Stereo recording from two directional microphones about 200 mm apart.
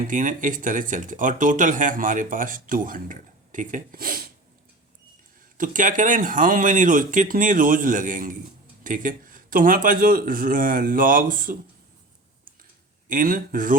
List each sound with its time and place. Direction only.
0.0 s speech: 40° right (ahead or behind)
5.5 s speech: 40° right (ahead or behind)
13.1 s speech: 45° right (ahead or behind)